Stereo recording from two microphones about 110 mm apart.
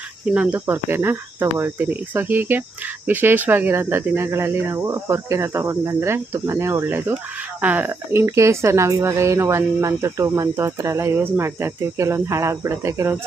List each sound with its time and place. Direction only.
0.3 s cricket: 10° right (ahead or behind)